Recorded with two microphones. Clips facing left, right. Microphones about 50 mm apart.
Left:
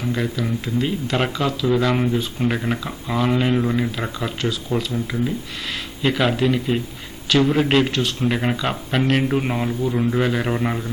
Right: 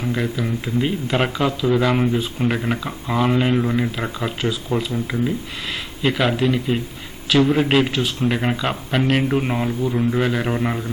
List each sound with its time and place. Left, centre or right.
0.0 s speech: centre